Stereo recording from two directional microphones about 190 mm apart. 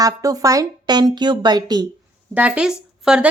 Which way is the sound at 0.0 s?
20° right (ahead or behind).